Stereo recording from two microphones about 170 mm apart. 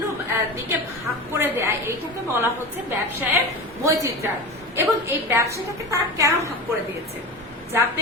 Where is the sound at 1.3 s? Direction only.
15° right (ahead or behind).